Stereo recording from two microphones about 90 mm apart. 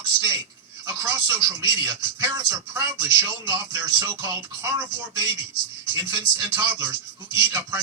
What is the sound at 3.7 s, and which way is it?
Speech, 40° right (ahead or behind).